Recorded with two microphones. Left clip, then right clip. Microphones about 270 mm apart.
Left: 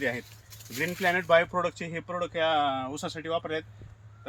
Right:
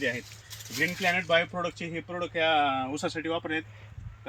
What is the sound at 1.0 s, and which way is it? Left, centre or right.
Speech, centre.